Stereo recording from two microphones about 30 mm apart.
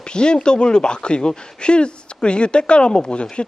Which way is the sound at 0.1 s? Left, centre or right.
Left.